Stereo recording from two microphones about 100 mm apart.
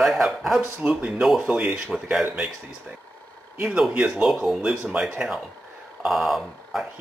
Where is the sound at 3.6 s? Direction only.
5° right (ahead or behind).